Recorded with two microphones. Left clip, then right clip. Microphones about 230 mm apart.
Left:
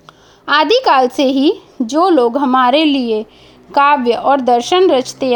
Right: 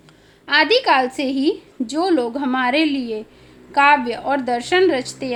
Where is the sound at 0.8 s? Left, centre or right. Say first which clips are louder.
Left 6 dB; left.